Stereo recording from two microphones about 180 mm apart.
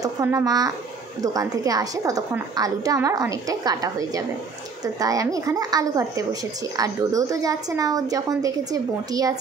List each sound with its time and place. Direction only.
0.0 s a woman's voice: 15° right (ahead or behind)